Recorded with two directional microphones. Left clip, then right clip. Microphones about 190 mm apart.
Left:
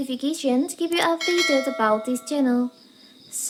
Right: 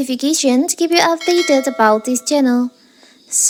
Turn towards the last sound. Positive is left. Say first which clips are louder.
# right 15 dB
turn(degrees=-35)  # may be behind; listen again after turning